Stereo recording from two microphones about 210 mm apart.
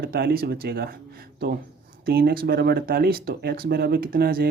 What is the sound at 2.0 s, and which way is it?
Speech, 45° right (ahead or behind).